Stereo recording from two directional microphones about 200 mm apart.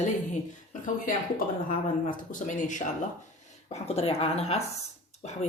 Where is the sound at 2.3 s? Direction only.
40° left (ahead or behind).